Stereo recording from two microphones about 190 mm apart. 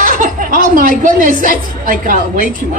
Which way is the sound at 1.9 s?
45° right (ahead or behind).